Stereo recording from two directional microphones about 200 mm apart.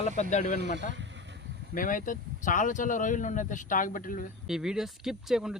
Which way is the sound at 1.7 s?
40° left (ahead or behind).